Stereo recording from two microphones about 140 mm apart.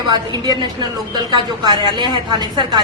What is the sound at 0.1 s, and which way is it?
A woman's voice, 30° right (ahead or behind).